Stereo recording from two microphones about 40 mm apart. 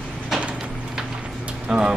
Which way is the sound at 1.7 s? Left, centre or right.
Centre.